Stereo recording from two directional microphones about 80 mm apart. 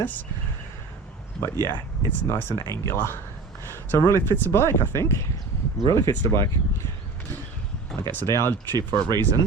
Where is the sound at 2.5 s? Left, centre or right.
Left.